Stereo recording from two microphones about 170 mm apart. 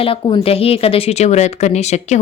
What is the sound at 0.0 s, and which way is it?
Speech, 35° left (ahead or behind).